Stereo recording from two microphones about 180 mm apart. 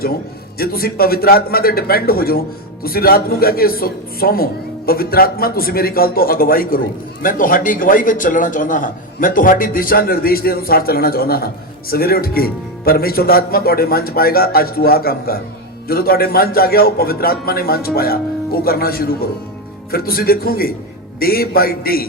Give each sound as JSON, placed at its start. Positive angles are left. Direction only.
{"t": 0.6, "sound": "a man's voice", "side_deg": 55}